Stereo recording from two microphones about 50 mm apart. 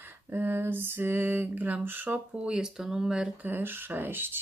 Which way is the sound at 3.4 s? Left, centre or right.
Right.